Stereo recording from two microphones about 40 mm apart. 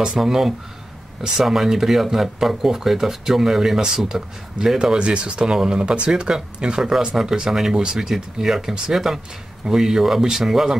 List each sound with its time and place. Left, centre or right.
0.0 s speech: centre
4.9 s speech: right; by 10.8 s centre